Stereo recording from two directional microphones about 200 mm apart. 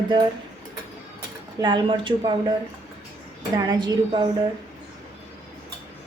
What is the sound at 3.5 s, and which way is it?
Speech, 20° right (ahead or behind).